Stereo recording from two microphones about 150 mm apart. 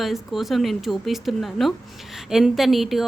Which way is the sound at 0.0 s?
Centre (ahead or behind).